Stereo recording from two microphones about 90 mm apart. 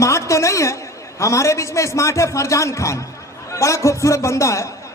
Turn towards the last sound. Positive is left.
turn(degrees=35)  # may be behind; listen again after turning